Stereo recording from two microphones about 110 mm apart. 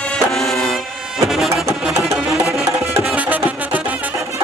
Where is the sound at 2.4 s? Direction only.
25° right (ahead or behind).